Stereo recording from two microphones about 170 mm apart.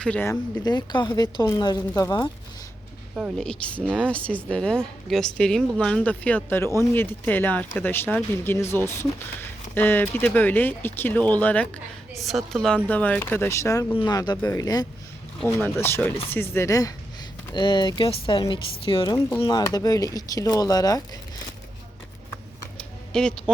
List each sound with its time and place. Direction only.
0.0 s speech: 10° left (ahead or behind)
0.6 s speech: 25° left (ahead or behind)
3.2 s speech: centre (ahead or behind); by 21.2 s 20° left (ahead or behind)
23.1 s speech: 5° left (ahead or behind)